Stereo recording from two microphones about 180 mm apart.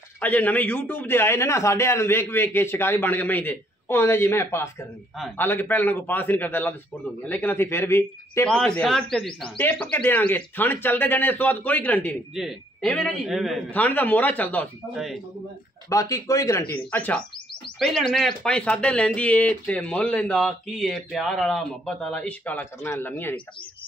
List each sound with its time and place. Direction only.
0.2 s a man's voice: 10° left (ahead or behind)
13.7 s a man's voice: 10° left (ahead or behind)
15.9 s a man's voice: 20° left (ahead or behind)